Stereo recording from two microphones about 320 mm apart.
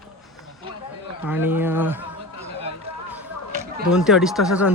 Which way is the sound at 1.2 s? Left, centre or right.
Centre.